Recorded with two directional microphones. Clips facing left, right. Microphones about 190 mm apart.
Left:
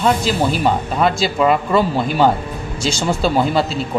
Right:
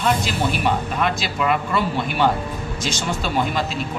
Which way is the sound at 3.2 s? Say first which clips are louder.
Left 7 dB; 35° left (ahead or behind).